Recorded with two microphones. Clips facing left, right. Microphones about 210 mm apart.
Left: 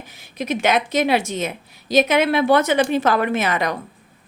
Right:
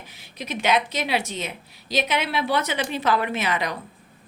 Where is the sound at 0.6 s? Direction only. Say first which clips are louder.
Left 4 dB; 50° left (ahead or behind).